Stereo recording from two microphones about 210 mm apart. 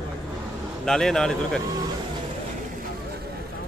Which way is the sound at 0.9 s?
Centre (ahead or behind).